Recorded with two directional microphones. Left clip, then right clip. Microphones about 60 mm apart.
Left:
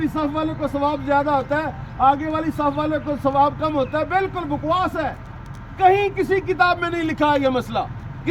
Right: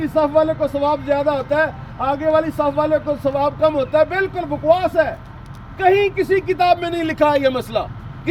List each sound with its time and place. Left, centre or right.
0.0 s a man's voice: left
0.8 s a man's voice: left
5.7 s a man's voice: left